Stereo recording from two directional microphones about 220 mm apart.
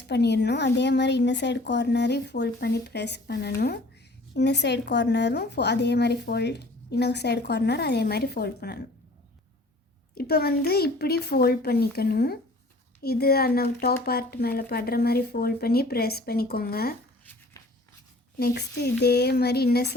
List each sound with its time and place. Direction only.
0.1 s a woman's voice: 50° left (ahead or behind)
10.2 s a woman's voice: 45° left (ahead or behind)
18.3 s a woman's voice: 45° left (ahead or behind)